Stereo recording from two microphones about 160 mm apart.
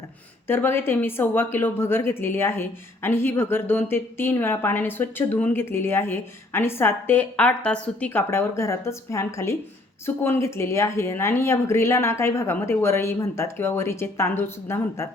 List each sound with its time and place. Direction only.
0.4 s speech: 15° left (ahead or behind)